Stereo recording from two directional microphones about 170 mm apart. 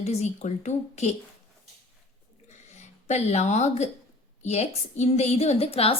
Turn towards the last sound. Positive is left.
turn(degrees=35)  # may be behind; listen again after turning